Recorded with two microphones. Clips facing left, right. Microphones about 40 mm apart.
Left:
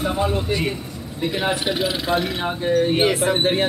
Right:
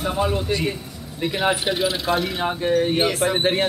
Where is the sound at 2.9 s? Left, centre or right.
Centre.